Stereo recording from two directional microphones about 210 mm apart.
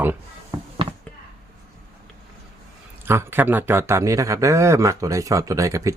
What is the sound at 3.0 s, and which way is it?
A man's voice, 10° right (ahead or behind).